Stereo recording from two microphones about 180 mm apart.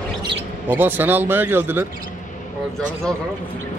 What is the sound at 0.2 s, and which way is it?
Bird, 30° right (ahead or behind).